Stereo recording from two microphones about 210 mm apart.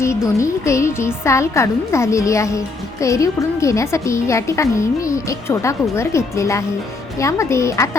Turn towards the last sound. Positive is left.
turn(degrees=15)  # may be behind; listen again after turning